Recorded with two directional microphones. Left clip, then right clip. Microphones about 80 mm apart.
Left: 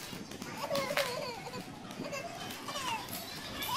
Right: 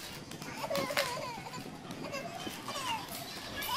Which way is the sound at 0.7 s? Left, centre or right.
Right.